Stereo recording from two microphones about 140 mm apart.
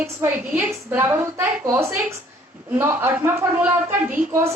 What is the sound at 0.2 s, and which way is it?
A woman's voice, 15° right (ahead or behind).